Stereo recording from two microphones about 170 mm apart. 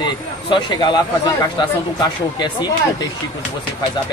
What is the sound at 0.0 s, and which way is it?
Speech, 25° left (ahead or behind).